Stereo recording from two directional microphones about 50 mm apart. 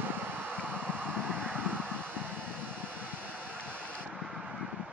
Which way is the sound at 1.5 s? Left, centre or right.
Right.